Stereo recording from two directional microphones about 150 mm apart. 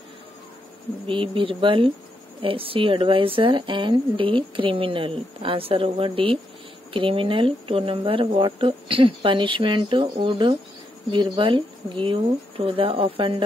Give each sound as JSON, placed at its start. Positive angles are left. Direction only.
{"t": 1.0, "sound": "speech", "side_deg": -35}